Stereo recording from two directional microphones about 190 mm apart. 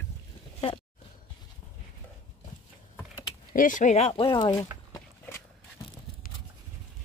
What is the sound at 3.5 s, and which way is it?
Speech, 45° left (ahead or behind).